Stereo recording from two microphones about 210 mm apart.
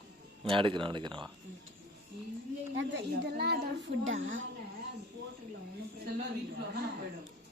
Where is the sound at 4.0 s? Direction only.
65° right (ahead or behind).